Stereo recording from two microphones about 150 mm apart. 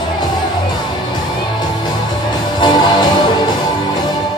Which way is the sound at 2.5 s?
30° left (ahead or behind).